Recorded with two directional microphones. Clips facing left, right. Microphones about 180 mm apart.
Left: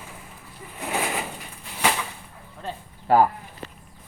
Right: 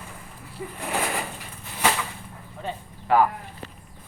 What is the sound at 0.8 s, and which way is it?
Bird, centre (ahead or behind).